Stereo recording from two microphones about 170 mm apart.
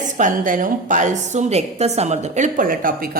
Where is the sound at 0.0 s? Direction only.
50° right (ahead or behind).